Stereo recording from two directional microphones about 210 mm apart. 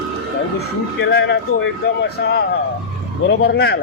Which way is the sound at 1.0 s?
55° left (ahead or behind).